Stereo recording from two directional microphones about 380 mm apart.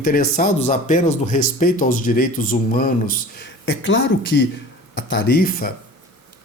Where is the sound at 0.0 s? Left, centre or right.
Centre.